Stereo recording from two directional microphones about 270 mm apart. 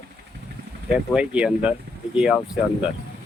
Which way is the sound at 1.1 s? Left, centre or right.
Centre.